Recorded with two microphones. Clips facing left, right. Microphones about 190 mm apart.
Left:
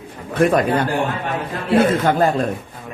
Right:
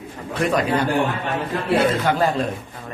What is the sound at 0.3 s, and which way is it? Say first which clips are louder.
A man's voice: left 4 dB; 50° left (ahead or behind).